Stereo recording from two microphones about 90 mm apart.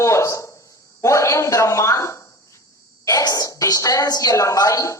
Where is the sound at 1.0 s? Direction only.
35° left (ahead or behind).